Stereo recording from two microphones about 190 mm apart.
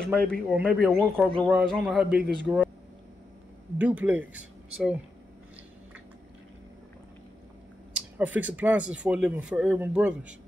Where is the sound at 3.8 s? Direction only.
10° right (ahead or behind).